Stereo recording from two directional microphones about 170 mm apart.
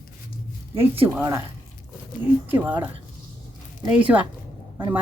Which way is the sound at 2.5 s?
10° right (ahead or behind).